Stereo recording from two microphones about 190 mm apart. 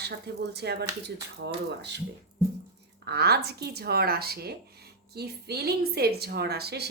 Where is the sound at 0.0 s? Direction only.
60° right (ahead or behind).